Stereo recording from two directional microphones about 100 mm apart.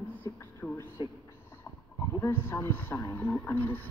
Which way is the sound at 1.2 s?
25° left (ahead or behind).